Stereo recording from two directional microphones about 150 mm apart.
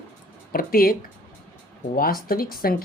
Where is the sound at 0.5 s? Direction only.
75° left (ahead or behind).